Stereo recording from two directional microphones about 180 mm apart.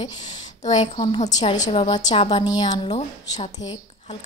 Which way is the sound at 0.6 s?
40° left (ahead or behind).